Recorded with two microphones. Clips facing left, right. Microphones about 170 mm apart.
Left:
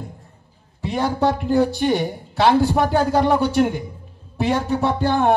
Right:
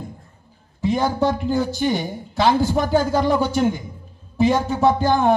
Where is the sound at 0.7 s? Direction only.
65° left (ahead or behind).